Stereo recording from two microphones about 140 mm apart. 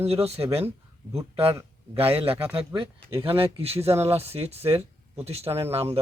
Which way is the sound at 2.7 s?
35° right (ahead or behind).